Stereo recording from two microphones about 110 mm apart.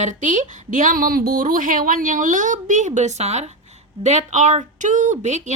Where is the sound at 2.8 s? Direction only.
90° right.